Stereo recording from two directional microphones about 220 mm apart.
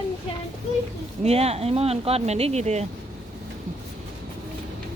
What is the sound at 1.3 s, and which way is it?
Speech, 30° right (ahead or behind).